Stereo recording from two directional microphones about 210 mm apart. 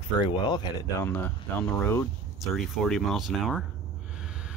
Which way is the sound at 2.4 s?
Centre (ahead or behind).